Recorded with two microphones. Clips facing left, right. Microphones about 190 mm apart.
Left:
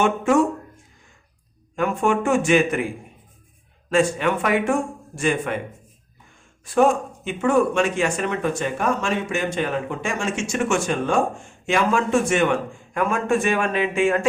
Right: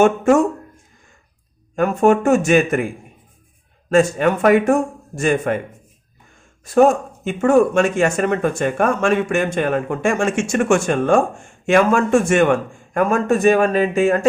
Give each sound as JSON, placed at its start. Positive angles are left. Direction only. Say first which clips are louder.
{"t": 0.0, "sound": "speech", "louder": "right 5 dB", "side_deg": -45}
{"t": 1.7, "sound": "speech", "louder": "right 6 dB", "side_deg": -45}
{"t": 3.8, "sound": "speech", "louder": "right 5 dB", "side_deg": -40}
{"t": 6.7, "sound": "speech", "louder": "right 4 dB", "side_deg": -45}